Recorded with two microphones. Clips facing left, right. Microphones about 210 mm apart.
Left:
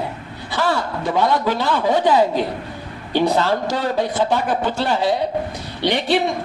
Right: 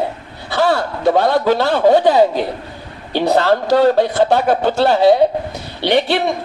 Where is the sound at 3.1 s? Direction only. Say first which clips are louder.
Right 3 dB; 65° right (ahead or behind).